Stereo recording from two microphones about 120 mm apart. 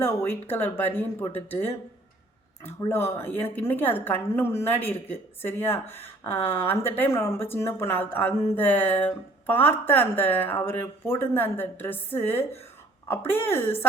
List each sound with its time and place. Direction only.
0.0 s a woman's voice: 15° left (ahead or behind)